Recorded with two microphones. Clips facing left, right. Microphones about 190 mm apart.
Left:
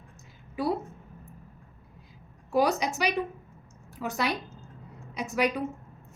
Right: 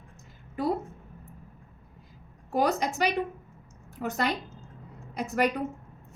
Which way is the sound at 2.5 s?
55° right (ahead or behind).